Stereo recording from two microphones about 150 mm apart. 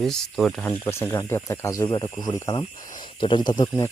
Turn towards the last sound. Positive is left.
turn(degrees=30)  # may be behind; listen again after turning